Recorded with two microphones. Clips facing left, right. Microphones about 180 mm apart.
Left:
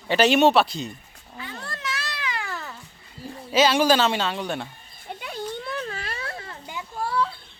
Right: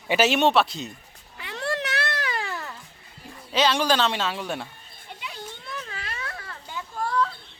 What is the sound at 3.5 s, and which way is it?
Speech, 5° left (ahead or behind).